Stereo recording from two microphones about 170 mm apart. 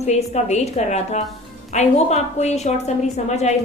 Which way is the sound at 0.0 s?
40° left (ahead or behind).